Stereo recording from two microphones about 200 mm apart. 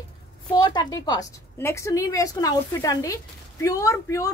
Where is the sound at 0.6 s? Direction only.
20° left (ahead or behind).